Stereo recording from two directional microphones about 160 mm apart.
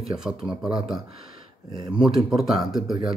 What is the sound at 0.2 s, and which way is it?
Speech, 5° right (ahead or behind).